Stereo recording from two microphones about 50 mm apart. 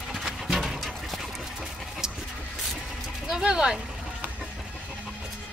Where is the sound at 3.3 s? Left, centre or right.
Centre.